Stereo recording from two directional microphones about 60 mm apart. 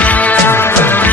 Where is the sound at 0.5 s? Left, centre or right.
Left.